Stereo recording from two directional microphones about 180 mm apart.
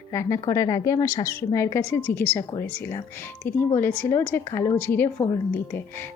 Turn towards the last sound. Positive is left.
turn(degrees=10)  # may be behind; listen again after turning